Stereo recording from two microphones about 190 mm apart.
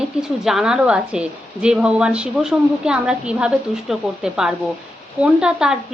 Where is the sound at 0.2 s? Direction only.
Centre (ahead or behind).